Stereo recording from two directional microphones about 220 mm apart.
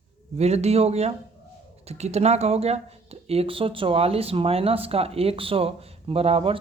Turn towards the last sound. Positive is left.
turn(degrees=-25)  # may be behind; listen again after turning